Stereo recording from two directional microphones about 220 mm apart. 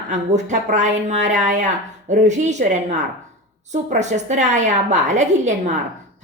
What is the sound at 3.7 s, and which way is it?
A woman's voice, 30° right (ahead or behind).